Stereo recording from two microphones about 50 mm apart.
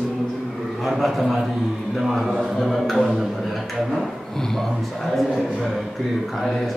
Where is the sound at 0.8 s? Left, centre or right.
Centre.